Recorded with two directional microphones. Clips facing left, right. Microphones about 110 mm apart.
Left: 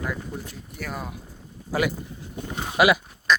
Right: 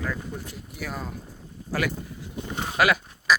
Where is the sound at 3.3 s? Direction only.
5° right (ahead or behind).